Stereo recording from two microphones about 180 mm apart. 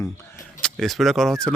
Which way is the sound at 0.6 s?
Centre (ahead or behind).